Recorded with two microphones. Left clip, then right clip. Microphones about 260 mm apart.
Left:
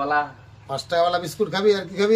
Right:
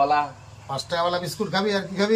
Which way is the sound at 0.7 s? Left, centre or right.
Centre.